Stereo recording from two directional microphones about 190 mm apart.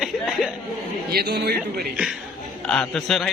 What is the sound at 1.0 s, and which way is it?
Speech, 55° right (ahead or behind).